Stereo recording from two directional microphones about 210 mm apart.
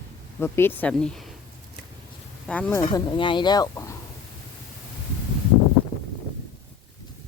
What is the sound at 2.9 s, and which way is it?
Speech, 20° left (ahead or behind).